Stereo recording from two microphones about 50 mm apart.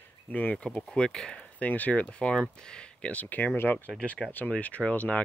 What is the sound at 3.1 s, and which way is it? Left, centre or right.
Speech, left.